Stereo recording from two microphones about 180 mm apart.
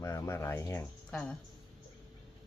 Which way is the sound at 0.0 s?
15° left (ahead or behind).